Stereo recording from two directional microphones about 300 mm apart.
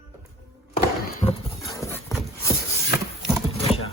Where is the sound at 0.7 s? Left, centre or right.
Left.